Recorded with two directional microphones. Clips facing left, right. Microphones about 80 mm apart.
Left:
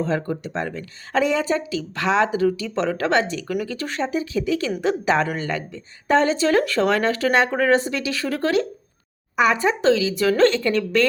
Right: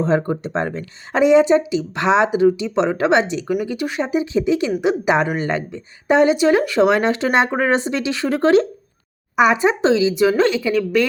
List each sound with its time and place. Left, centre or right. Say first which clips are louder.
0.0 s speech: right 5 dB; right; by 11.1 s centre